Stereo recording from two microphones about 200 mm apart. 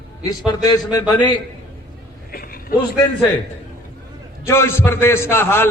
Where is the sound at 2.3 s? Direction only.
45° left (ahead or behind).